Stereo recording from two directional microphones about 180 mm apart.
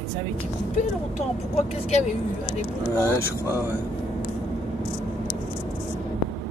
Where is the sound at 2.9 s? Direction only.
15° left (ahead or behind).